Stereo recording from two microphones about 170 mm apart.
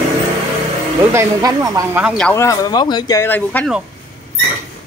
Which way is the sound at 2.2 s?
10° left (ahead or behind).